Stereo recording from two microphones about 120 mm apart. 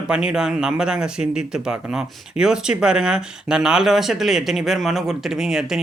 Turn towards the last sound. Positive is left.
turn(degrees=-5)  # may be behind; listen again after turning